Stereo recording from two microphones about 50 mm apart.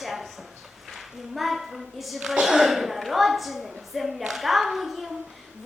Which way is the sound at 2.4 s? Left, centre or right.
Centre.